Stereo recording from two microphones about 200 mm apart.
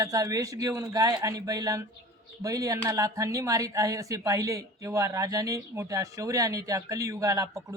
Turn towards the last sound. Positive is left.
turn(degrees=-15)  # may be behind; listen again after turning